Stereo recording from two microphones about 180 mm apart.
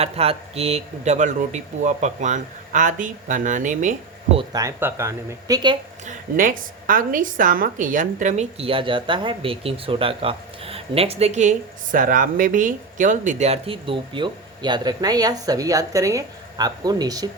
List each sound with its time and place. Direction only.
0.0 s speech: 35° right (ahead or behind)
4.4 s speech: 20° right (ahead or behind)
6.1 s a woman's voice: 50° right (ahead or behind); by 17.2 s 20° right (ahead or behind)